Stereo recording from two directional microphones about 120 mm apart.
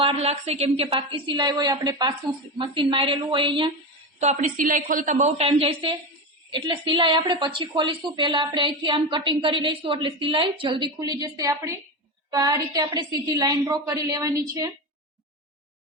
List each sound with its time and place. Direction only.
0.0 s a woman's voice: 55° right (ahead or behind)
4.2 s a woman's voice: 80° right; by 5.9 s 55° right (ahead or behind)
6.5 s a woman's voice: 40° right (ahead or behind)
11.2 s a woman's voice: 25° right (ahead or behind)